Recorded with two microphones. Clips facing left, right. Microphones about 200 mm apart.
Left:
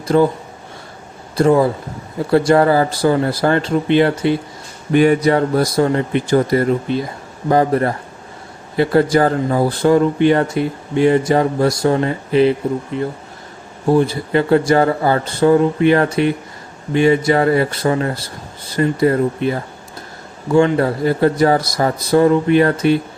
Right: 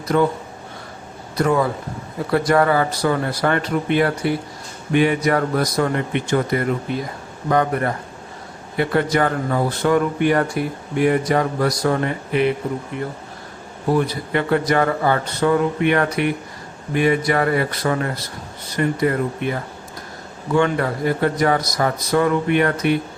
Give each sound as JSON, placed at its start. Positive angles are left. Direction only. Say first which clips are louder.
{"t": 0.1, "sound": "speech", "louder": "left 4 dB", "side_deg": 30}
{"t": 1.4, "sound": "speech", "louder": "left 6 dB", "side_deg": 30}
{"t": 4.9, "sound": "speech", "louder": "left 5 dB", "side_deg": 40}
{"t": 5.3, "sound": "speech", "louder": "left 4 dB", "side_deg": 30}